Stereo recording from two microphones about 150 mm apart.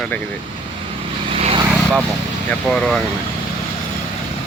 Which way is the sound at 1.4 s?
40° right (ahead or behind).